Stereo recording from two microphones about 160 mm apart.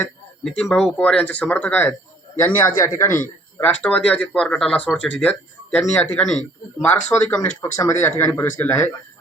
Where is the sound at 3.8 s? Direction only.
5° left (ahead or behind).